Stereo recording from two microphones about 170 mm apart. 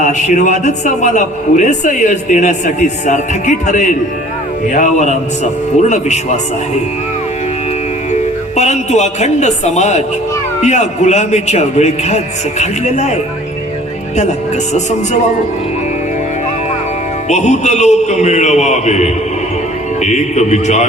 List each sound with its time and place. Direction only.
0.0 s a man's voice: 45° left (ahead or behind)
8.1 s a man's voice: 40° left (ahead or behind)
14.2 s a man's voice: 40° left (ahead or behind)
17.2 s a man's voice: 40° left (ahead or behind)